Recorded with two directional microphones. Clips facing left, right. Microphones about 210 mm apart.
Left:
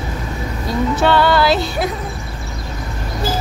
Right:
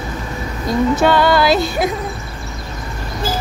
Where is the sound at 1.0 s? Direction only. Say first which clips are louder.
Left 1 dB; 15° right (ahead or behind).